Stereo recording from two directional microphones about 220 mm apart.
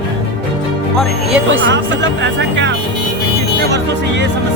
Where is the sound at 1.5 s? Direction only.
60° right (ahead or behind).